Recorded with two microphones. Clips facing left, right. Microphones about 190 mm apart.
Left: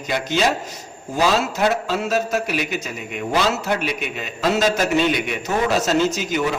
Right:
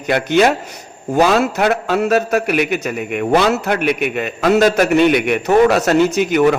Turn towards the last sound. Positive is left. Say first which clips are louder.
# right 9 dB
turn(degrees=-60)  # may be behind; listen again after turning